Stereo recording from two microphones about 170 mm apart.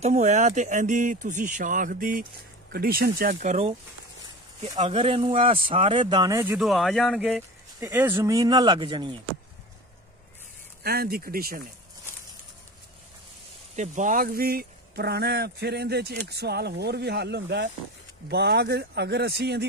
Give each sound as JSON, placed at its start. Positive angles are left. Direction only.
{"t": 0.0, "sound": "speech", "side_deg": -40}
{"t": 4.7, "sound": "speech", "side_deg": -35}
{"t": 6.6, "sound": "speech", "side_deg": 0}
{"t": 7.8, "sound": "speech", "side_deg": -10}
{"t": 10.8, "sound": "speech", "side_deg": -65}
{"t": 13.7, "sound": "speech", "side_deg": -50}
{"t": 18.3, "sound": "speech", "side_deg": -75}